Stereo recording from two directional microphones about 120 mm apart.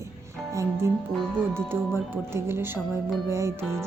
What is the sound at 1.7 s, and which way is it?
Speech, 20° right (ahead or behind).